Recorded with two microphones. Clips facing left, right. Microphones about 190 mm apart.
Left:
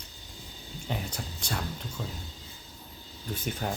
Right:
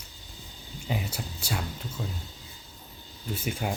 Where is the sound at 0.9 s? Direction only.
5° right (ahead or behind).